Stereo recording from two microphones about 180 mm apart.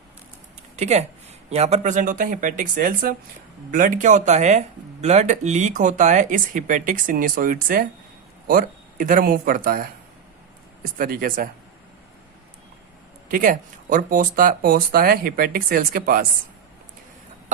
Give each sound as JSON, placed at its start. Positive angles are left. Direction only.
{"t": 0.8, "sound": "speech", "side_deg": -40}
{"t": 10.9, "sound": "speech", "side_deg": -50}
{"t": 13.2, "sound": "speech", "side_deg": -50}